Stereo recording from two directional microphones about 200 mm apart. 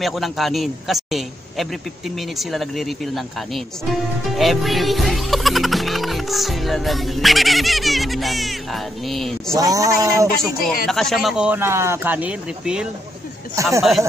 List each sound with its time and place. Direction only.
0.0 s a man's voice: centre (ahead or behind)
9.6 s speech: 15° right (ahead or behind)
10.9 s a man's voice: centre (ahead or behind); by 13.8 s 15° right (ahead or behind)